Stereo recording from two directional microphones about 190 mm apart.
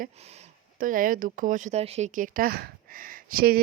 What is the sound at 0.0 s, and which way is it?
Speech, 35° right (ahead or behind).